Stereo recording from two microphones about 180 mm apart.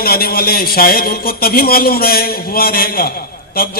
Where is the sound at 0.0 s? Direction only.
55° left (ahead or behind).